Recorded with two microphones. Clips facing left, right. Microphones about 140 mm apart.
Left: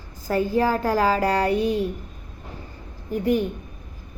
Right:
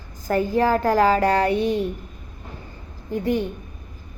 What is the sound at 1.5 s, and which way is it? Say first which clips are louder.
Speech: right 1 dB; 35° left (ahead or behind).